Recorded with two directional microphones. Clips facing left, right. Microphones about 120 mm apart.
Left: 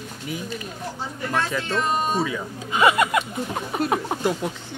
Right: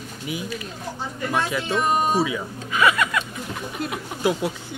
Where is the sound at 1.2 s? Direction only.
10° right (ahead or behind).